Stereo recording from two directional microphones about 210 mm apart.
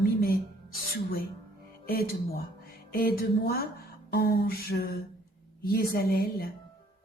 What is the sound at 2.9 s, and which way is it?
A woman's voice, 45° left (ahead or behind).